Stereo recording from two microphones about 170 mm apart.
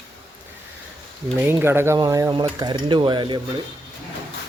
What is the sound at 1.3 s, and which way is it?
Speech, 10° right (ahead or behind).